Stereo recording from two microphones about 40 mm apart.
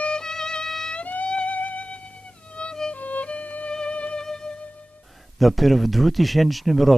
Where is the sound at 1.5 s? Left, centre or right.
Left.